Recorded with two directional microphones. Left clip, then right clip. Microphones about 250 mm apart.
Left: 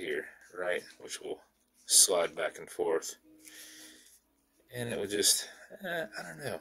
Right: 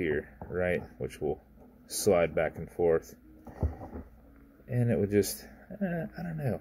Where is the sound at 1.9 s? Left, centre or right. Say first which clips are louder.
Right 2 dB; centre.